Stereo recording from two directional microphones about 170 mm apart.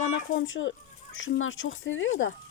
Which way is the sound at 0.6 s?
60° left (ahead or behind).